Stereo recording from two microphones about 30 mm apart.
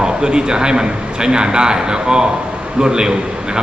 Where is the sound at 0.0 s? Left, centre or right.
Right.